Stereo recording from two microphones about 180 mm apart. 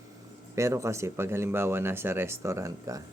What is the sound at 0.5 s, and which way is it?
Speech, 15° right (ahead or behind).